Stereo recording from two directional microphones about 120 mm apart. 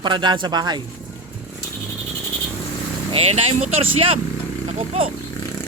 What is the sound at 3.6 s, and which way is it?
Speech, 55° right (ahead or behind).